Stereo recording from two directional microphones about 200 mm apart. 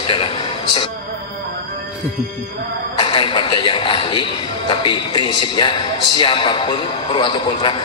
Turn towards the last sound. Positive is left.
turn(degrees=25)  # may be behind; listen again after turning